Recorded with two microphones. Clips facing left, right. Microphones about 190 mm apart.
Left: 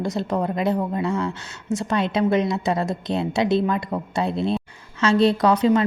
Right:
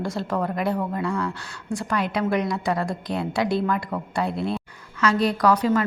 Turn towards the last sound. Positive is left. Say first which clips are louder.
# left 2 dB
turn(degrees=25)  # may be behind; listen again after turning